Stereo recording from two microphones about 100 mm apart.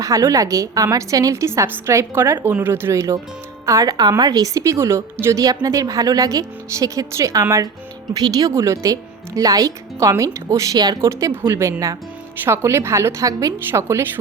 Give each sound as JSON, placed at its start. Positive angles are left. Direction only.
{"t": 0.0, "sound": "a woman's voice", "side_deg": -35}